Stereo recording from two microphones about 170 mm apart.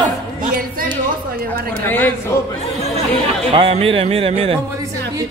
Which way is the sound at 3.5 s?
35° right (ahead or behind).